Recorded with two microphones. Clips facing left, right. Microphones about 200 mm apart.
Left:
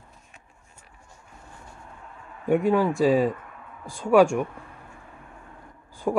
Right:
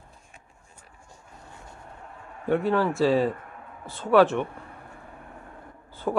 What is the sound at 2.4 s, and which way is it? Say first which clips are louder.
Speech: left 2 dB; 15° left (ahead or behind).